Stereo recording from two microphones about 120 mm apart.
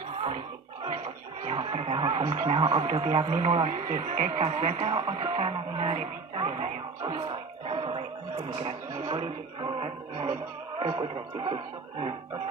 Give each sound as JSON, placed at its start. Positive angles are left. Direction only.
{"t": 1.5, "sound": "music", "side_deg": -55}
{"t": 2.3, "sound": "speech", "side_deg": -75}
{"t": 2.6, "sound": "speech", "side_deg": -50}
{"t": 2.9, "sound": "speech", "side_deg": -65}
{"t": 7.2, "sound": "music", "side_deg": -45}
{"t": 8.4, "sound": "speech", "side_deg": -40}
{"t": 10.8, "sound": "speech", "side_deg": -45}